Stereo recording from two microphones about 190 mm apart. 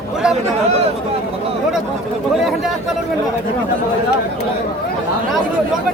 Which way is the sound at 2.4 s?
Centre (ahead or behind).